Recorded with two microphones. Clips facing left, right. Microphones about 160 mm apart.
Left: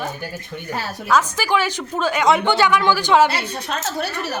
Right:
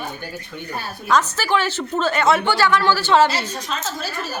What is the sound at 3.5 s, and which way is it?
Speech, 60° left (ahead or behind).